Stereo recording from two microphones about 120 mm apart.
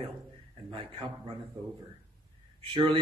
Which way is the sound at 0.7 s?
45° right (ahead or behind).